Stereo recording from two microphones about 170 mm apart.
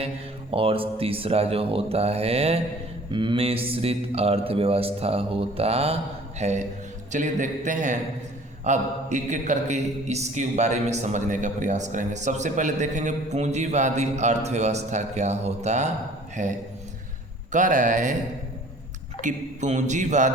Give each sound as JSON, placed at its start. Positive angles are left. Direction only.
{"t": 0.5, "sound": "speech", "side_deg": -35}
{"t": 19.2, "sound": "speech", "side_deg": -45}